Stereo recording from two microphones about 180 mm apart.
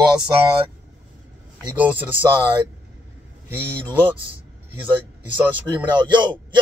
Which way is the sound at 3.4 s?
10° right (ahead or behind).